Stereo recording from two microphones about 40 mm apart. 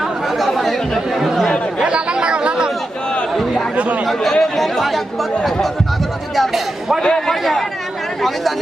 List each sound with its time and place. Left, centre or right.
0.0 s speech: centre
1.8 s chatter: right
4.2 s speech: centre
6.3 s speech: centre
7.0 s a man's voice: centre